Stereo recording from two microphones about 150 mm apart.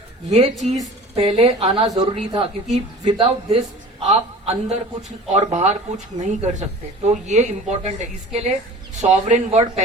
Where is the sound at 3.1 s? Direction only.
35° right (ahead or behind).